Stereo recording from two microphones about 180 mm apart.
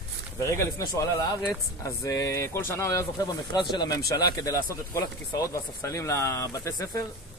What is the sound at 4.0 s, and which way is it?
Speech, 60° left (ahead or behind).